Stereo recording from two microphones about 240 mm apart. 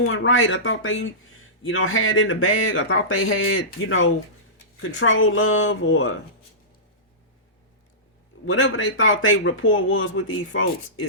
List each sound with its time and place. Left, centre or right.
0.0 s speech: left
8.4 s speech: left